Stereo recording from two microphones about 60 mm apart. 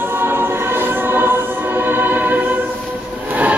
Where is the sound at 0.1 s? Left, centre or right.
Right.